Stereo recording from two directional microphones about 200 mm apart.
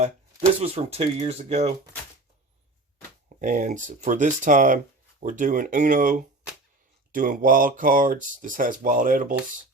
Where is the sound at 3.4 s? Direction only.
40° right (ahead or behind).